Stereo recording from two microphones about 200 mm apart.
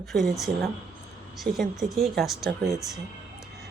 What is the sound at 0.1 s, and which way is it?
Speech, centre (ahead or behind).